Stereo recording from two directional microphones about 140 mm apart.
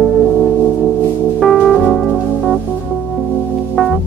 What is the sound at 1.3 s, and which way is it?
Music, centre (ahead or behind).